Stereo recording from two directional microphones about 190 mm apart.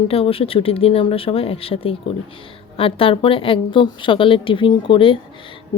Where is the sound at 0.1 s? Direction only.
30° left (ahead or behind).